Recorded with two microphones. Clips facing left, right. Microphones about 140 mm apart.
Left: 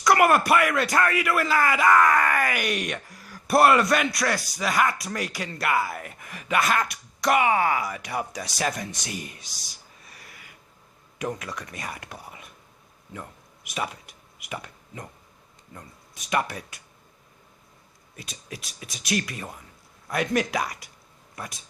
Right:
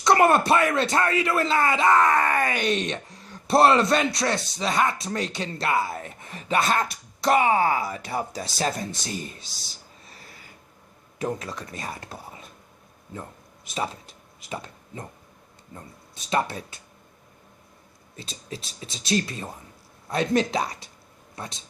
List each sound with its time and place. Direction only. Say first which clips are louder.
0.0 s speech: right 1 dB; 25° right (ahead or behind)
10.0 s a sound: even; 25° right (ahead or behind)
11.2 s speech: right 2 dB; 30° right (ahead or behind)
13.7 s a sound: right 2 dB; 30° right (ahead or behind)
15.7 s speech: right 2 dB; 30° right (ahead or behind)
18.2 s speech: right 3 dB; 25° right (ahead or behind)